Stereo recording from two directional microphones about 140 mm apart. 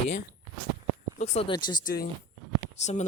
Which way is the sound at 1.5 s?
30° left (ahead or behind).